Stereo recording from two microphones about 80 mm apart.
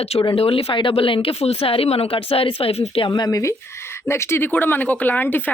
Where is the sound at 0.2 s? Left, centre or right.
Left.